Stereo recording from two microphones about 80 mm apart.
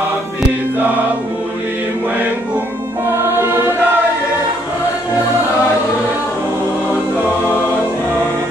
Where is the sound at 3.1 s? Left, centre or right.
Right.